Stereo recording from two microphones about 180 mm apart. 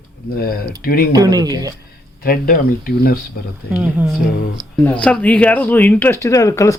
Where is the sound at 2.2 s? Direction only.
55° left (ahead or behind).